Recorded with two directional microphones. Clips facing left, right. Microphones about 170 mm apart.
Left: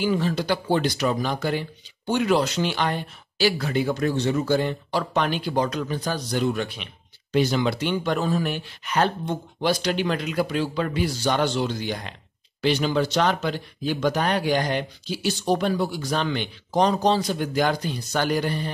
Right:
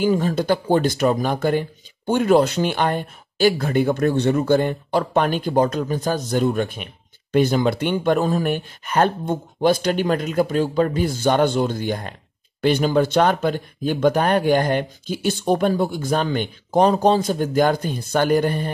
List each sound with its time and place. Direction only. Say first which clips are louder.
0.0 s speech: right 4 dB; 45° right (ahead or behind)